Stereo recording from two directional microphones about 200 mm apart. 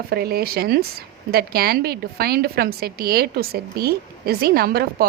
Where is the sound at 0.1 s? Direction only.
50° right (ahead or behind).